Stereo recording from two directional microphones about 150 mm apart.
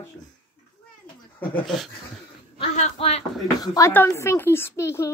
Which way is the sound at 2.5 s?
45° left (ahead or behind).